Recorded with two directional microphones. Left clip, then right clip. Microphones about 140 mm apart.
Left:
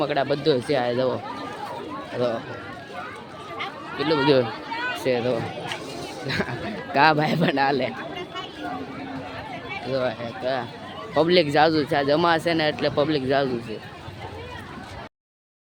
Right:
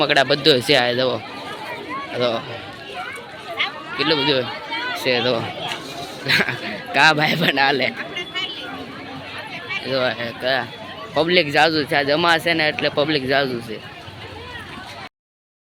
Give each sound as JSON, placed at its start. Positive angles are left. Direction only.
{"t": 0.0, "sound": "speech", "side_deg": 5}
{"t": 3.9, "sound": "speech", "side_deg": 10}
{"t": 4.2, "sound": "speech", "side_deg": 30}
{"t": 5.0, "sound": "speech", "side_deg": 10}
{"t": 6.9, "sound": "speech", "side_deg": 25}
{"t": 9.9, "sound": "speech", "side_deg": 5}
{"t": 11.1, "sound": "speech", "side_deg": 15}